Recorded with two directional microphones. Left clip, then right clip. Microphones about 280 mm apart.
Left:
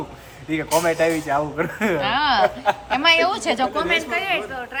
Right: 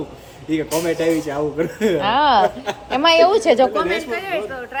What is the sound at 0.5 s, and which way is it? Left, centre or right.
Speech, left.